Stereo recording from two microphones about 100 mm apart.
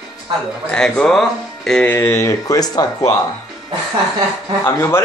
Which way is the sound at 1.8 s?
25° left (ahead or behind).